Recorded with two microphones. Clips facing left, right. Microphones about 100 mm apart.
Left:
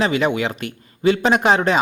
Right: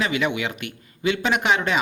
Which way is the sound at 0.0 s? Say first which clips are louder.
Left 5 dB; 35° left (ahead or behind).